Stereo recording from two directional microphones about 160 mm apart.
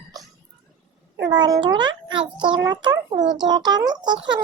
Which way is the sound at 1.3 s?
25° right (ahead or behind).